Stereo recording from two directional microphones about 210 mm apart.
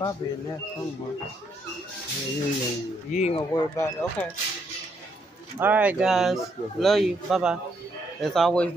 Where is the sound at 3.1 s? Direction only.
30° left (ahead or behind).